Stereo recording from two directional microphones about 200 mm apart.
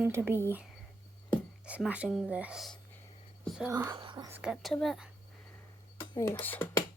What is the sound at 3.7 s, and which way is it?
Speech, 15° right (ahead or behind).